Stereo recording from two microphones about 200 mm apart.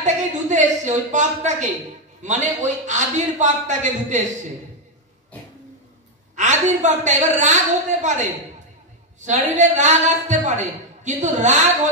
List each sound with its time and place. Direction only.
0.0 s a sound: 35° right (ahead or behind)
2.2 s a woman's voice: 35° right (ahead or behind)
6.3 s a woman's voice: 35° right (ahead or behind)